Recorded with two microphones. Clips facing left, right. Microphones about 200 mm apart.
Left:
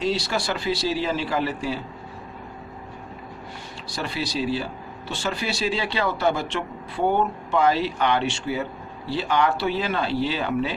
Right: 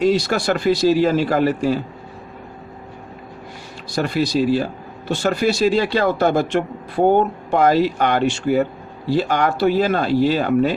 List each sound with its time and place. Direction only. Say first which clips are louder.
0.0 s speech: right 7 dB; 50° right (ahead or behind)
3.9 s speech: right 9 dB; 45° right (ahead or behind)